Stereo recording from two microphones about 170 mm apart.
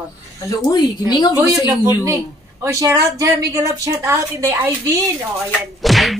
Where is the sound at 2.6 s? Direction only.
20° right (ahead or behind).